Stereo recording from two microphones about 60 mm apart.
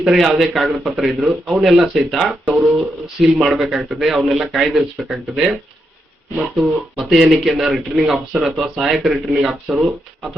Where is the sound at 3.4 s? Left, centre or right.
Centre.